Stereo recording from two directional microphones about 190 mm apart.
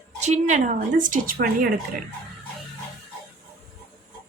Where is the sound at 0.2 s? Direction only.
40° right (ahead or behind).